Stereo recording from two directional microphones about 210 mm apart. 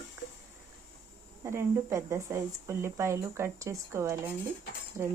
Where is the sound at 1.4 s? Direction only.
10° right (ahead or behind).